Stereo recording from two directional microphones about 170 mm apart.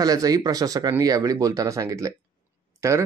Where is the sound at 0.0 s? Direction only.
20° right (ahead or behind).